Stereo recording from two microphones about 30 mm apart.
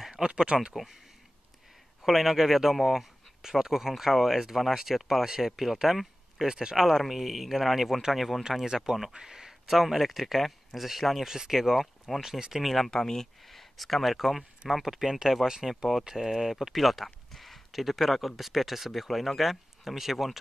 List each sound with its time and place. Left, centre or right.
0.2 s speech: right
2.0 s speech: centre
6.4 s speech: right
6.8 s speech: centre
8.5 s speech: centre
9.7 s speech: centre
11.2 s speech: centre
12.6 s speech: centre
12.9 s speech: centre
13.5 s speech: centre
16.7 s speech: centre